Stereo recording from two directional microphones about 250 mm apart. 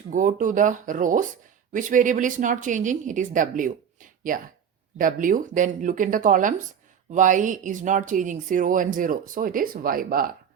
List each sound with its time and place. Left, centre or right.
0.1 s speech: right